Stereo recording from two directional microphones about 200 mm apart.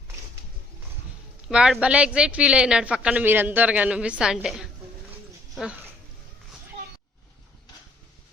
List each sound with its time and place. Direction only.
1.5 s speech: 5° right (ahead or behind)